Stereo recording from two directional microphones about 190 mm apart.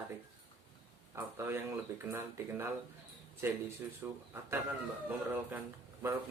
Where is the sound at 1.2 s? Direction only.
10° right (ahead or behind).